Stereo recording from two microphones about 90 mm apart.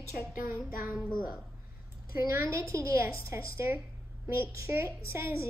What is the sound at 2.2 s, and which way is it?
A woman's voice, 30° right (ahead or behind).